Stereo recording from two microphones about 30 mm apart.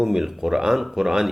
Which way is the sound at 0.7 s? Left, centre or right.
Centre.